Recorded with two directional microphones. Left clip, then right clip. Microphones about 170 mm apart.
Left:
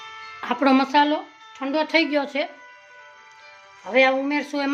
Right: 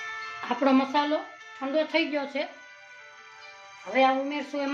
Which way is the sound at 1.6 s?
90° left.